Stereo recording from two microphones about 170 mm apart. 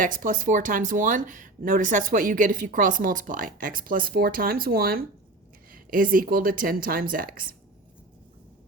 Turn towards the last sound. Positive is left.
turn(degrees=-55)  # may be behind; listen again after turning